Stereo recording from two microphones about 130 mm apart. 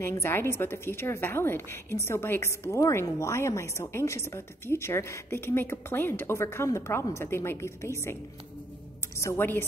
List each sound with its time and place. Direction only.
0.0 s a woman's voice: 20° left (ahead or behind)